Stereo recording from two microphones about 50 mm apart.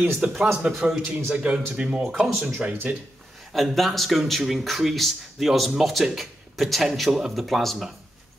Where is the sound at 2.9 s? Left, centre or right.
Right.